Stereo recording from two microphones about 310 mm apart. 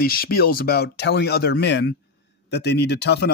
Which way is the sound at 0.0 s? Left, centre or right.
Left.